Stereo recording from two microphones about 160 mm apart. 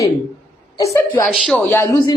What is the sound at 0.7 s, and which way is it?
Speech, 20° left (ahead or behind).